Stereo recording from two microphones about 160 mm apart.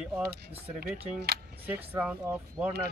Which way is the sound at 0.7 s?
80° right.